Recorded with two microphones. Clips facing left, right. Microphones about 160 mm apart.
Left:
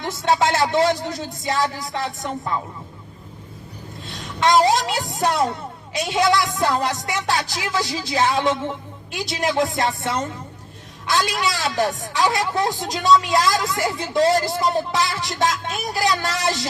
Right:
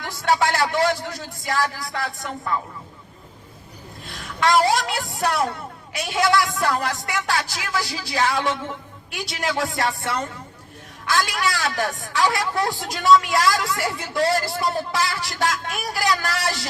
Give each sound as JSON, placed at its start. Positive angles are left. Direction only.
{"t": 0.0, "sound": "a man's voice", "side_deg": 20}
{"t": 4.0, "sound": "a man's voice", "side_deg": 20}